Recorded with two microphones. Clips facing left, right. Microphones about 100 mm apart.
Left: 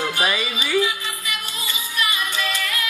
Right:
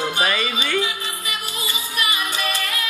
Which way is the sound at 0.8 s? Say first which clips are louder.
Left 3 dB; 30° right (ahead or behind).